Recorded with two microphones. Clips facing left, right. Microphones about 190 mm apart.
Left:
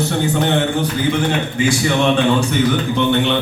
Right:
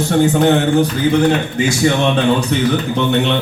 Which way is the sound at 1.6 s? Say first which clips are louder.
Right 1 dB; 40° right (ahead or behind).